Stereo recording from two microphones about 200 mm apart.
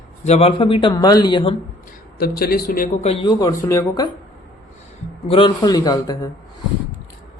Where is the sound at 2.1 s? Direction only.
50° left (ahead or behind).